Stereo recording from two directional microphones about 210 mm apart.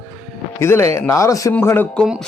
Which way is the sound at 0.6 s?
15° left (ahead or behind).